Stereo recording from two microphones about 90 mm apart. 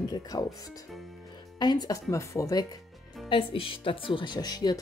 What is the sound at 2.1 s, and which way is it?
Speech, 35° left (ahead or behind).